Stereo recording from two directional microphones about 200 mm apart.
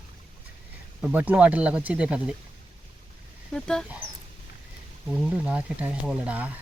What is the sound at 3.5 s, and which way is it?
Speech, 5° left (ahead or behind).